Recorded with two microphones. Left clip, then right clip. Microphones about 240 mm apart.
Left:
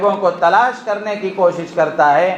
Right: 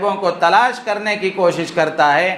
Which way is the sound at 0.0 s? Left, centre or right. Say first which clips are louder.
Left 2 dB; right.